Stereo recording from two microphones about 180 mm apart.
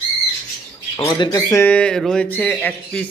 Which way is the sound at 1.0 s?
25° left (ahead or behind).